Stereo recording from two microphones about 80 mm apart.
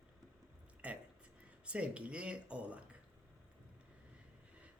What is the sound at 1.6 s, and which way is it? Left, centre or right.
Speech, centre.